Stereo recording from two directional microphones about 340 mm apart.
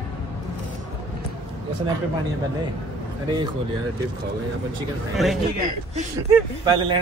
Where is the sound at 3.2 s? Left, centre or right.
Centre.